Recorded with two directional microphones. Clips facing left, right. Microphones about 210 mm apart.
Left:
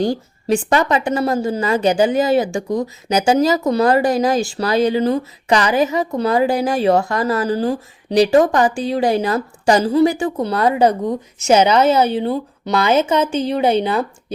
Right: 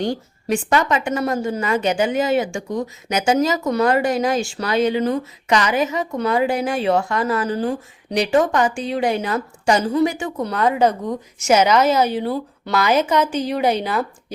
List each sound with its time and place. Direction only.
0.0 s a woman's voice: 35° left (ahead or behind)